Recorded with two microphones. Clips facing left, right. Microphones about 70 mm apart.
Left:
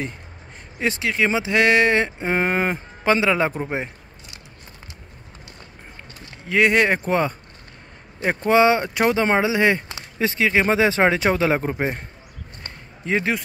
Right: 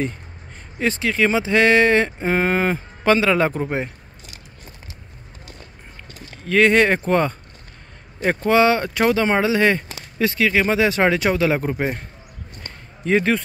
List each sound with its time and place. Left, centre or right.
0.7 s speech: centre
6.4 s speech: centre
8.4 s speech: left
13.0 s speech: centre